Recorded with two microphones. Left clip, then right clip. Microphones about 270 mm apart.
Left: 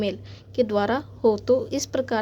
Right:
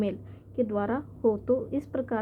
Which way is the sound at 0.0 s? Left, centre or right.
Left.